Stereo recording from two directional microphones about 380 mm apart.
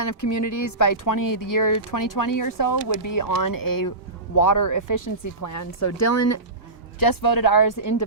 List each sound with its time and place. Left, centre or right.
0.0 s speech: left
7.0 s speech: left